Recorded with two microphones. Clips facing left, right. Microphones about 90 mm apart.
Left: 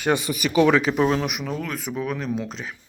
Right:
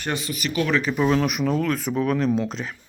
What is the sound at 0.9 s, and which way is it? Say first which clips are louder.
Speech: left 2 dB; 35° left (ahead or behind).